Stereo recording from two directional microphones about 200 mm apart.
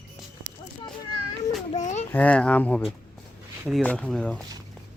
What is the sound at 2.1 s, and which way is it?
Speech, 5° left (ahead or behind).